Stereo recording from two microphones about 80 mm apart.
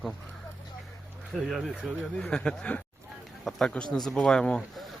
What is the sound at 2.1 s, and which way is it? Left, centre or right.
Speech, centre.